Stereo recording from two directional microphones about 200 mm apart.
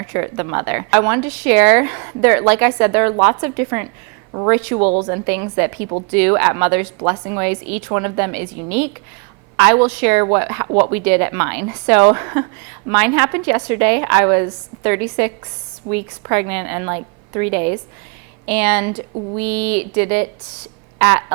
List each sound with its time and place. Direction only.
0.1 s speech: 15° right (ahead or behind)
4.8 s speech: 30° right (ahead or behind)